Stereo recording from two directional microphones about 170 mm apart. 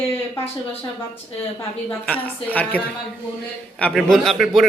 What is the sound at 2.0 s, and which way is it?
A man's voice, 10° left (ahead or behind).